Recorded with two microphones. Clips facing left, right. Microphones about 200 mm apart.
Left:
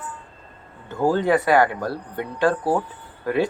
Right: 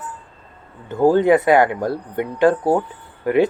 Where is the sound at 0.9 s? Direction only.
20° right (ahead or behind).